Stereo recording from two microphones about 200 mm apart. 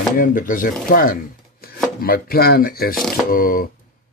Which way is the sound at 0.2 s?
40° left (ahead or behind).